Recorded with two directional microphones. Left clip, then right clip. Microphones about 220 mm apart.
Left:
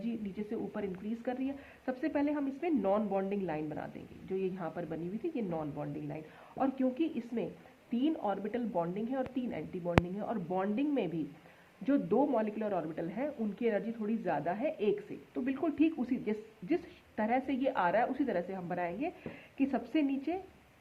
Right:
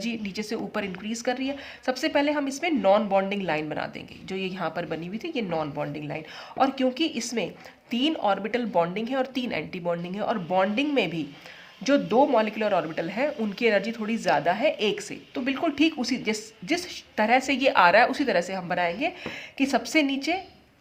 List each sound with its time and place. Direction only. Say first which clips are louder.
0.0 s speech: right 8 dB; 30° right (ahead or behind)